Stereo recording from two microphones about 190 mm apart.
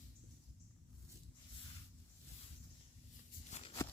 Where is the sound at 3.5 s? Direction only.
30° left (ahead or behind).